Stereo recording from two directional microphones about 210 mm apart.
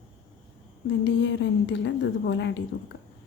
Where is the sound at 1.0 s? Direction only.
60° left (ahead or behind).